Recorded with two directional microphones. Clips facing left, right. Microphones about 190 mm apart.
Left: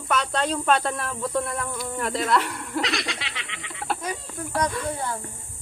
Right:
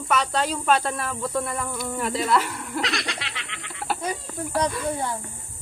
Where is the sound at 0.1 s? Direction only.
Centre (ahead or behind).